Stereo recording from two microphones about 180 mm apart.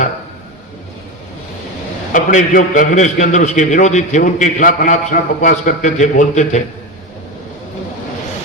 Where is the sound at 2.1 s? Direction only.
50° left (ahead or behind).